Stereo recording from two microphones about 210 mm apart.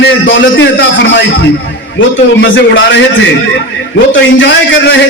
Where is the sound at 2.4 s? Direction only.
60° left (ahead or behind).